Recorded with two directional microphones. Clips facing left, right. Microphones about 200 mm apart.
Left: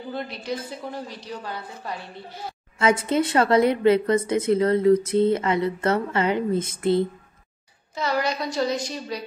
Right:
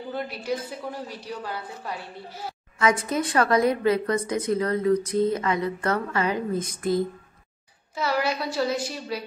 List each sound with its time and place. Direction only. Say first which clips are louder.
0.1 s a woman's voice: right 1 dB; 5° right (ahead or behind)
2.8 s a woman's voice: left 3 dB; 25° left (ahead or behind)
7.9 s a woman's voice: left 1 dB; 5° right (ahead or behind)